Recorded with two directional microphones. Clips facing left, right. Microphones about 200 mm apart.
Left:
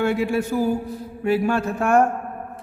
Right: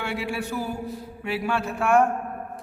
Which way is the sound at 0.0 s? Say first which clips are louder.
Left 8 dB; 45° left (ahead or behind).